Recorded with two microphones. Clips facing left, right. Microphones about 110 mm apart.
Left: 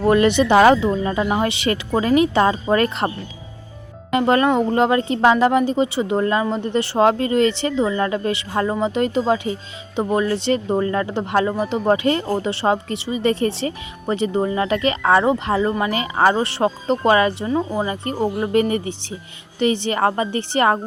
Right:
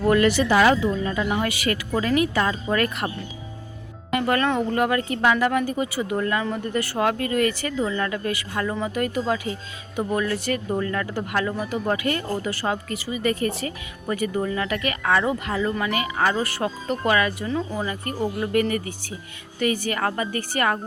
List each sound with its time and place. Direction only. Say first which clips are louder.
0.0 s speech: left 4 dB; 20° left (ahead or behind)
4.1 s speech: left 5 dB; 25° left (ahead or behind)